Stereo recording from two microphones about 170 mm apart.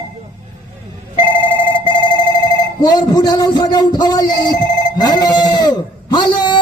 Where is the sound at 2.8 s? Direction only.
25° left (ahead or behind).